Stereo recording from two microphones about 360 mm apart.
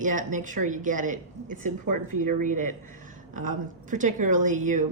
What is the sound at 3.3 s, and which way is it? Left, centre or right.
Speech, right.